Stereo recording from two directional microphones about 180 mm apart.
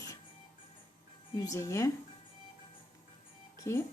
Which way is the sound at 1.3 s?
20° left (ahead or behind).